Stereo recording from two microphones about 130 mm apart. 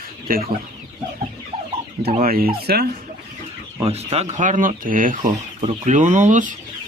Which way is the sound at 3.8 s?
55° right (ahead or behind).